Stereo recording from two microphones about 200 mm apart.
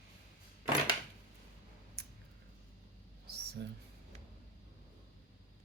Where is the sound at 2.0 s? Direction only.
55° right (ahead or behind).